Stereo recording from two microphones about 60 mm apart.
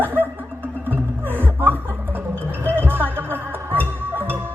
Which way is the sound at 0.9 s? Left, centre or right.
Right.